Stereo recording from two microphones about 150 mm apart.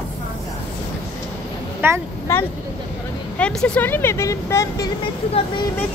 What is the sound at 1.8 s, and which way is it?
Speech, 15° right (ahead or behind).